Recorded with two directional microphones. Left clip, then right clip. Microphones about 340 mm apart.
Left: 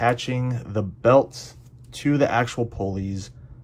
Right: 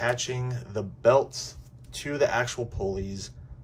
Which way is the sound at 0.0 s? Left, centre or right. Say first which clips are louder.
Left 5 dB; centre.